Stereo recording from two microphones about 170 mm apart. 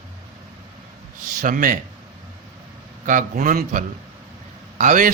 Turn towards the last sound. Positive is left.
turn(degrees=-50)  # may be behind; listen again after turning